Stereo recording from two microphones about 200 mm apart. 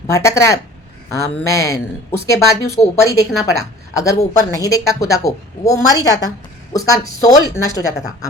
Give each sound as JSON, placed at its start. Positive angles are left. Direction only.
{"t": 0.1, "sound": "a woman's voice", "side_deg": 15}